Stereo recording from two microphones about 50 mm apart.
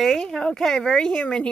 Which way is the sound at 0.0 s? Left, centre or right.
Centre.